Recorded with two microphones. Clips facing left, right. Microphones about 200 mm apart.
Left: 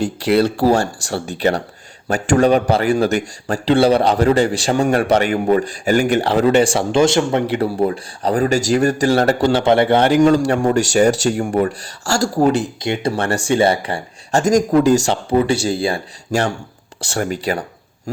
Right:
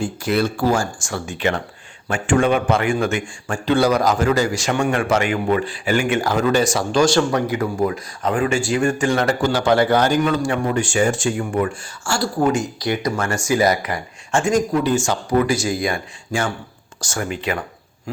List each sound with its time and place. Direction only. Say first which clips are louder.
0.0 s a man's voice: left 5 dB; 35° left (ahead or behind)
15.1 s a man's voice: left 2 dB; 25° left (ahead or behind)